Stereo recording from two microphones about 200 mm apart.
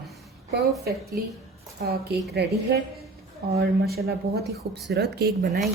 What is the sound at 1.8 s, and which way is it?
A woman's voice, 50° right (ahead or behind).